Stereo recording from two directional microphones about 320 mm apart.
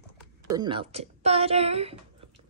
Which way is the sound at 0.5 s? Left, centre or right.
Centre.